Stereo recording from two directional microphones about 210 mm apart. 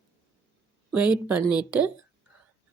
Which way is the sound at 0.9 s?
5° right (ahead or behind).